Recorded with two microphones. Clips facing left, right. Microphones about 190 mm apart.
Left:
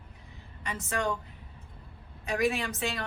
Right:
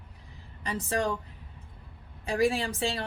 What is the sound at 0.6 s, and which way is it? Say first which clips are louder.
Speech: right 3 dB; 35° right (ahead or behind).